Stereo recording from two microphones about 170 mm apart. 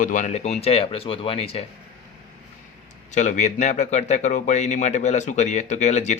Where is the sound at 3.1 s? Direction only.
45° left (ahead or behind).